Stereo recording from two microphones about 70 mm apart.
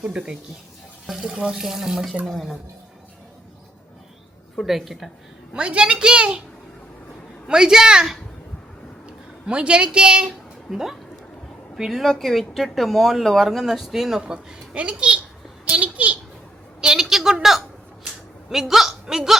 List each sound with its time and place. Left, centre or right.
0.0 s speech: centre
4.5 s speech: centre
5.5 s speech: centre
7.4 s speech: centre
15.7 s a sound: right
16.8 s a woman's voice: centre
18.4 s a woman's voice: centre